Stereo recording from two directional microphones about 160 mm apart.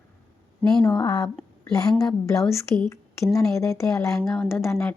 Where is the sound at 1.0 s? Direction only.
20° left (ahead or behind).